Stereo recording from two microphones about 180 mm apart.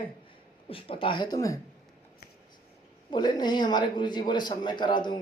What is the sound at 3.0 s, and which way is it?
Speech, 25° left (ahead or behind).